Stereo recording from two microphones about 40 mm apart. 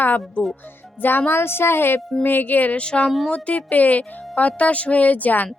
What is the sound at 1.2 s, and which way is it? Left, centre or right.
Speech, left.